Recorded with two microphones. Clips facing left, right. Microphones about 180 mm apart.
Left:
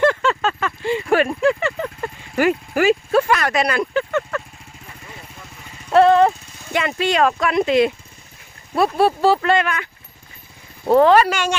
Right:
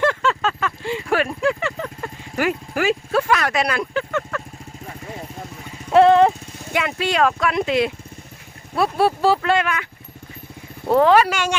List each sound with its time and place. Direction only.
0.0 s a sound: centre (ahead or behind)
1.4 s clip-clop: centre (ahead or behind)
5.9 s speech: 20° right (ahead or behind)
6.7 s speech: 5° right (ahead or behind)
11.0 s speech: 5° right (ahead or behind)